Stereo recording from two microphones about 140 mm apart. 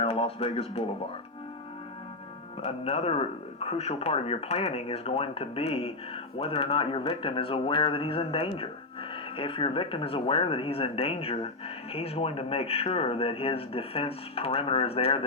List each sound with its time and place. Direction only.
0.0 s speech: 45° left (ahead or behind)
2.6 s speech: 45° left (ahead or behind)